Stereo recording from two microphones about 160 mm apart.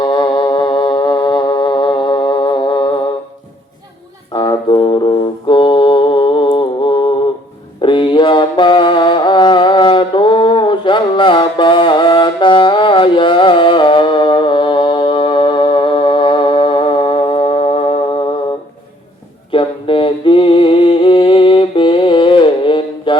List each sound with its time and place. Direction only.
0.0 s music: 30° left (ahead or behind)
4.3 s music: 30° left (ahead or behind)
19.5 s a sound: 35° left (ahead or behind)